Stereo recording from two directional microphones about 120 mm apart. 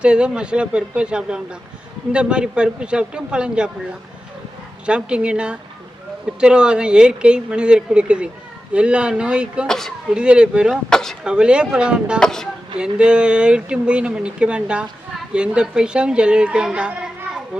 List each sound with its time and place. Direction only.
0.0 s speech: 10° right (ahead or behind)
4.9 s speech: 10° right (ahead or behind)
9.6 s speech: 5° left (ahead or behind)
10.2 s speech: 10° right (ahead or behind)
10.8 s speech: 5° left (ahead or behind)
11.2 s speech: 5° right (ahead or behind)
12.2 s speech: 5° left (ahead or behind)
12.7 s a woman's voice: 10° right (ahead or behind)